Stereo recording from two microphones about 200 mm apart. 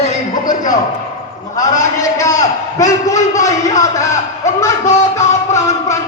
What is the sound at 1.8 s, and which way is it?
A man's voice, 15° left (ahead or behind).